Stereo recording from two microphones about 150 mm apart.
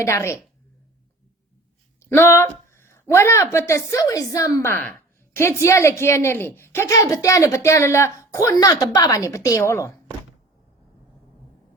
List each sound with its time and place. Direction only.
0.0 s a woman's voice: 20° left (ahead or behind)
2.0 s a woman's voice: 15° left (ahead or behind)